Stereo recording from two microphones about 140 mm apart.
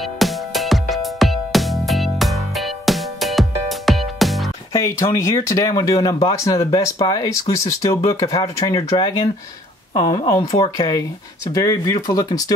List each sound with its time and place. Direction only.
0.2 s music: centre (ahead or behind)
4.7 s speech: 20° left (ahead or behind)